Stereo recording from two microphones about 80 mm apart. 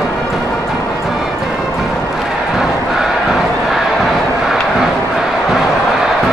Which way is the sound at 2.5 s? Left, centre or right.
Centre.